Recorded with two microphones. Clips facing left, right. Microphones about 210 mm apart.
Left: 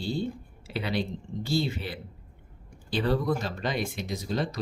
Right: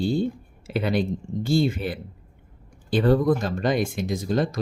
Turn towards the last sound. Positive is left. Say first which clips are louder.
# right 6 dB
turn(degrees=-50)  # may be behind; listen again after turning